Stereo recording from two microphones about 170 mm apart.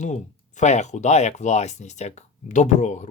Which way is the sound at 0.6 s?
45° left (ahead or behind).